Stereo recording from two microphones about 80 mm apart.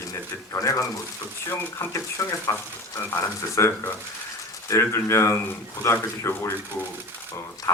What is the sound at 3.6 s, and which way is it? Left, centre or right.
Speech, left.